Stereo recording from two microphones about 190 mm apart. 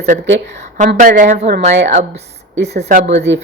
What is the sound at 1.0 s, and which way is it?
Speech, 40° right (ahead or behind).